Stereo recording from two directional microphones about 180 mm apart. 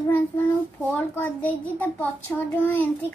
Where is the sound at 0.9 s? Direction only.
10° left (ahead or behind).